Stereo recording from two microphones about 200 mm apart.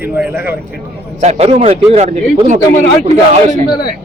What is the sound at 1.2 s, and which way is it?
Speech, 30° right (ahead or behind).